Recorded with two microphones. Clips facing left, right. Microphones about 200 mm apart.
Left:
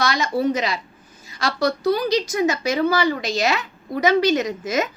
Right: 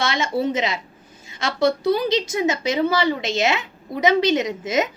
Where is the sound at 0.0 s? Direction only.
25° right (ahead or behind).